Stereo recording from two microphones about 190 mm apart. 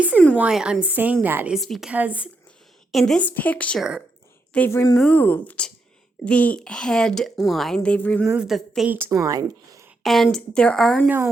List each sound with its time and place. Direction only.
0.3 s a woman's voice: 5° right (ahead or behind)
8.3 s a woman's voice: 5° right (ahead or behind)
10.0 s a woman's voice: centre (ahead or behind)